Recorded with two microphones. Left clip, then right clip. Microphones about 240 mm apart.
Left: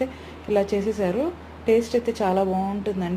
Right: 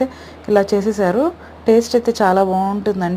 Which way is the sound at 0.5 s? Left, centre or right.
Right.